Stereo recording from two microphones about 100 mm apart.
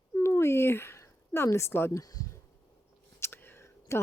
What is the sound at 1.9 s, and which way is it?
Speech, 40° left (ahead or behind).